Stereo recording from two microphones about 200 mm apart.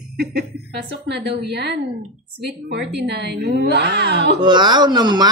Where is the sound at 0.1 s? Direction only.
50° right (ahead or behind).